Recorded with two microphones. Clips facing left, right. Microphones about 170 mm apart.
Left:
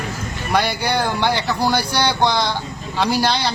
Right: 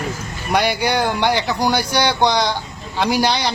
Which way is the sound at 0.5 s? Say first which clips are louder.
Right 2 dB; 15° right (ahead or behind).